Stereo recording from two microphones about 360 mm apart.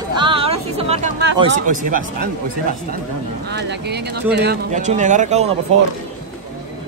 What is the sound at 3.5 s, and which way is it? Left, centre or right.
Speech, right.